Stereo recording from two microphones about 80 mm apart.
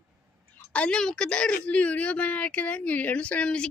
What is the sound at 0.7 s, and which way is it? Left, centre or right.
A woman's voice, centre.